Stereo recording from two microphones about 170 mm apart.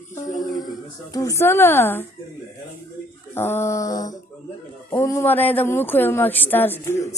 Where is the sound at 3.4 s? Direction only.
15° left (ahead or behind).